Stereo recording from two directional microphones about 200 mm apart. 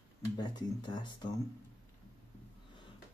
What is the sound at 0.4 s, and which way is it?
Speech, 20° left (ahead or behind).